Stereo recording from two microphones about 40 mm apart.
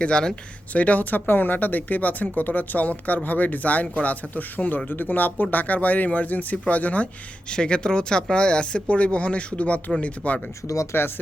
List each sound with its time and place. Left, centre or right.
0.0 s a woman's voice: left
0.7 s speech: left
1.3 s speech: left
7.4 s a woman's voice: left
10.9 s speech: left